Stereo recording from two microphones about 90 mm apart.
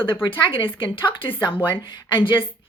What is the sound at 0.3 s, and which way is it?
Speech, 70° left (ahead or behind).